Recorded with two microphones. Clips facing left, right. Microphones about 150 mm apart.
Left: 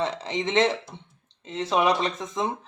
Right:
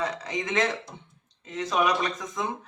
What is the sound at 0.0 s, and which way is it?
Speech, 25° left (ahead or behind).